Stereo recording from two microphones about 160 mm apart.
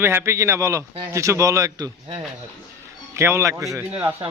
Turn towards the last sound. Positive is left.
turn(degrees=-15)  # may be behind; listen again after turning